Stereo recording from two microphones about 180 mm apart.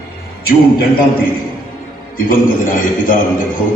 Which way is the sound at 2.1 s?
50° left (ahead or behind).